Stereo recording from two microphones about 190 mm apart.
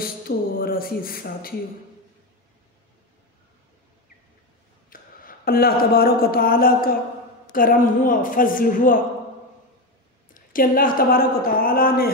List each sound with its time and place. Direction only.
0.6 s a woman's voice: 50° left (ahead or behind)
4.8 s a woman's voice: 50° left (ahead or behind)
10.3 s a woman's voice: 50° left (ahead or behind)